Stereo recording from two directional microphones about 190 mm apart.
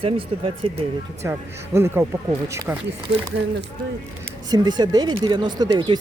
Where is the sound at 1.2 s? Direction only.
15° right (ahead or behind).